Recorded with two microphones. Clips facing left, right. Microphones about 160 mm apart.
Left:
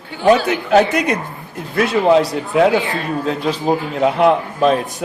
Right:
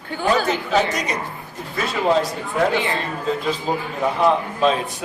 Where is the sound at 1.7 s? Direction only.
70° left (ahead or behind).